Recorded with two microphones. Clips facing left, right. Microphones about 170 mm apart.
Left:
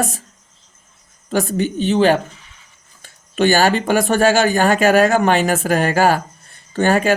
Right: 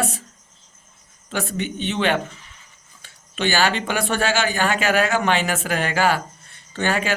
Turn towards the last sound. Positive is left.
turn(degrees=45)  # may be behind; listen again after turning